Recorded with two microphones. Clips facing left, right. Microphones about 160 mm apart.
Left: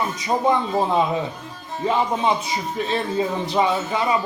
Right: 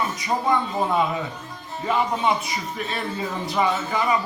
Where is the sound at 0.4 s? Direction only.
25° left (ahead or behind).